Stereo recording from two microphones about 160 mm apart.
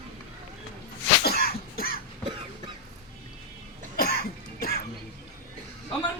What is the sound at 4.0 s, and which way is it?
Cough, 70° left (ahead or behind).